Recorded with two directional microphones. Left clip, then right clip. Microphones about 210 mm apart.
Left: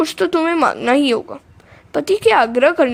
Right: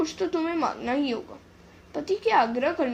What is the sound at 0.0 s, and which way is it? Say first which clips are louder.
A woman's voice: left 11 dB; 50° left (ahead or behind).